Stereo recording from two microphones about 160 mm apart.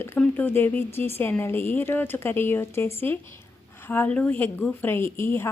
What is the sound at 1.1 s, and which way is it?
A woman's voice, 15° left (ahead or behind).